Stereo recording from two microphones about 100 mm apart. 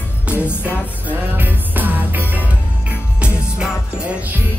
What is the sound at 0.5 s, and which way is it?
Music, 20° left (ahead or behind).